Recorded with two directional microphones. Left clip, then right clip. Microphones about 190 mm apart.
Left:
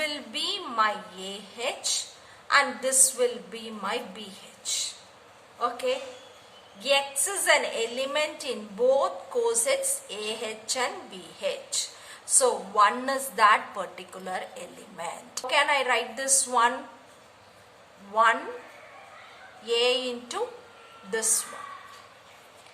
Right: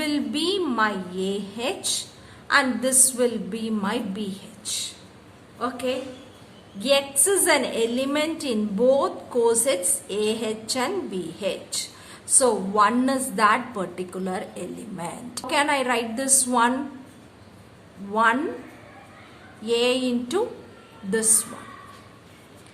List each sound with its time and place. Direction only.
0.0 s a woman's voice: 15° right (ahead or behind)
18.1 s a woman's voice: 15° right (ahead or behind)
19.6 s a woman's voice: 15° right (ahead or behind)